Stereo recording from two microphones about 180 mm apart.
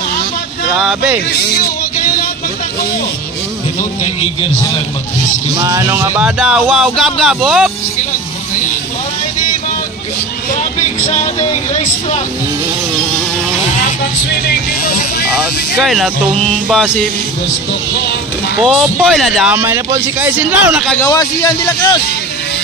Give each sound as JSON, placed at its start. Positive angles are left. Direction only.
{"t": 0.7, "sound": "vehicle", "side_deg": -5}
{"t": 4.0, "sound": "a man's voice", "side_deg": 30}
{"t": 5.6, "sound": "speech", "side_deg": -15}
{"t": 11.7, "sound": "a man's voice", "side_deg": 40}
{"t": 14.4, "sound": "vehicle", "side_deg": 60}
{"t": 15.8, "sound": "speech", "side_deg": 0}
{"t": 18.6, "sound": "speech", "side_deg": -5}
{"t": 21.0, "sound": "a man's voice", "side_deg": 20}